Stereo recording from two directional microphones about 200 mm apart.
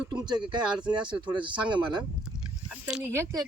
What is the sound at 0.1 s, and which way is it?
Speech, 20° right (ahead or behind).